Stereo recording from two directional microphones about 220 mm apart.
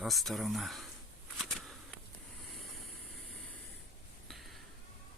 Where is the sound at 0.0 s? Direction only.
Centre (ahead or behind).